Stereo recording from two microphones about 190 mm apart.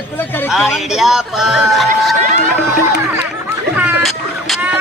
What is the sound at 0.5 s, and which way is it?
Speech, centre (ahead or behind).